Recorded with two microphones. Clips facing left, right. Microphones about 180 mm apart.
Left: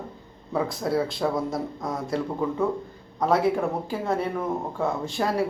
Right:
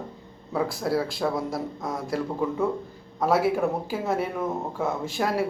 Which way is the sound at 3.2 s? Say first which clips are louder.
Even; 5° right (ahead or behind).